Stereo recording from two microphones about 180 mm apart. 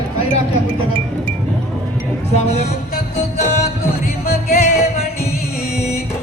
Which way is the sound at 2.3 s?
35° left (ahead or behind).